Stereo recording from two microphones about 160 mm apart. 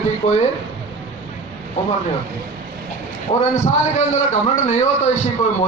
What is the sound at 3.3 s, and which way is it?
A man's voice, 45° left (ahead or behind).